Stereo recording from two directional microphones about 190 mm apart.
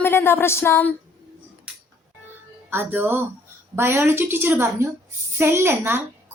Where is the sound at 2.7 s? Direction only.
10° right (ahead or behind).